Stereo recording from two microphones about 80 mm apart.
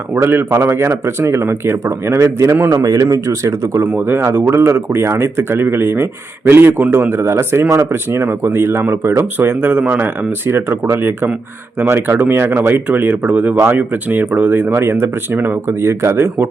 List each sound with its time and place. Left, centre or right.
0.2 s a man's voice: right
3.8 s speech: right